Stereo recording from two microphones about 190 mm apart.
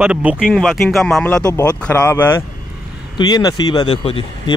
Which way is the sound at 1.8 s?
5° left (ahead or behind).